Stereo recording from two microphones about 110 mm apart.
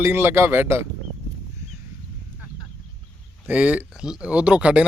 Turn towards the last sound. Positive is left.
turn(degrees=-10)  # may be behind; listen again after turning